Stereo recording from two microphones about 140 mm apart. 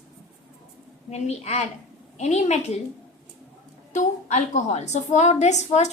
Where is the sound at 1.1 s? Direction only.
50° left (ahead or behind).